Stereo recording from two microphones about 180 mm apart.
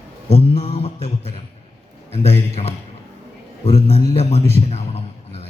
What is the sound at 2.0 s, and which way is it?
Speech, 35° left (ahead or behind).